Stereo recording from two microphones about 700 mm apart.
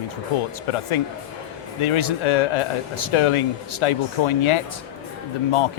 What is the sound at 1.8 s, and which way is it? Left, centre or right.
Speech, left.